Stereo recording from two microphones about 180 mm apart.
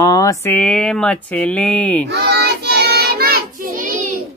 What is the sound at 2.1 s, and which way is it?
Child singing, 65° right (ahead or behind).